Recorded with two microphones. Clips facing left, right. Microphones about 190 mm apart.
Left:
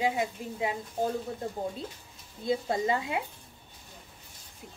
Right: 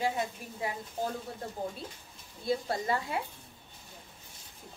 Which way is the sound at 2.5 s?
20° left (ahead or behind).